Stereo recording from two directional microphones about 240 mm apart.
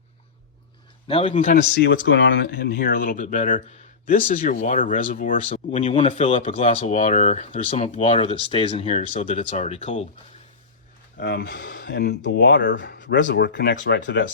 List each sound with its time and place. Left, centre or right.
1.0 s speech: left
1.5 s speech: left
11.2 s speech: left